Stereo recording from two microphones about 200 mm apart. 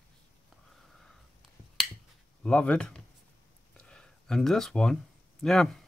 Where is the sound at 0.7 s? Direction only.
Centre (ahead or behind).